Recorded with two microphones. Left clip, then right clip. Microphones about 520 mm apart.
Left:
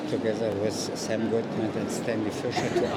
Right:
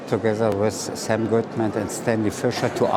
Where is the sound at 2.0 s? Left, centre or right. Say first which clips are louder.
Right 9 dB; right.